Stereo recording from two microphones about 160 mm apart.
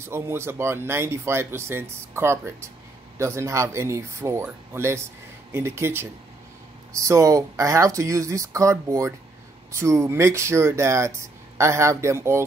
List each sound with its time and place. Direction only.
0.0 s speech: 15° right (ahead or behind)